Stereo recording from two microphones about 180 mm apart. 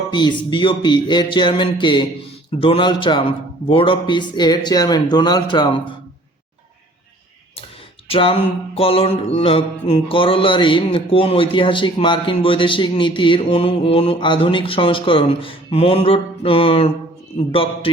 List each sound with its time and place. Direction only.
0.1 s music: 25° left (ahead or behind)
8.0 s music: 30° left (ahead or behind)